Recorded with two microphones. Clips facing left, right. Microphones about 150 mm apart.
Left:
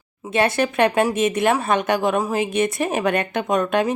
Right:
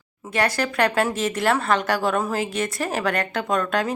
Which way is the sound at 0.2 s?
25° left (ahead or behind).